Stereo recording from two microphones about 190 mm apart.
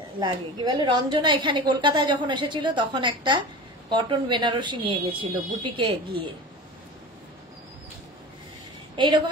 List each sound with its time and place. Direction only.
0.2 s a woman's voice: 25° right (ahead or behind)